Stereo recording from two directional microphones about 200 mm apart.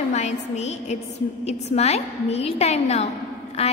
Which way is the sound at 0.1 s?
35° left (ahead or behind).